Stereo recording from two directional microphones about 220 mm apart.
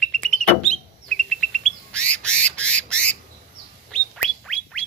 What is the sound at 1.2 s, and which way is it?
Bird, 5° left (ahead or behind).